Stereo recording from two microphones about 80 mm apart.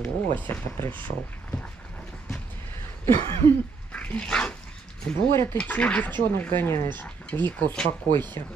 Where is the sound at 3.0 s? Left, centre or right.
Left.